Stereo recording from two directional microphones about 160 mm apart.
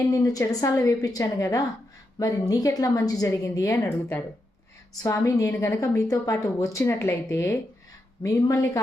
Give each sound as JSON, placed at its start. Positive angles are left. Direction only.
{"t": 0.0, "sound": "a woman's voice", "side_deg": 20}